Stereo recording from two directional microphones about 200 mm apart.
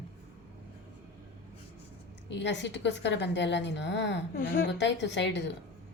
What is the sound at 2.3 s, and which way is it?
A woman's voice, 60° left (ahead or behind).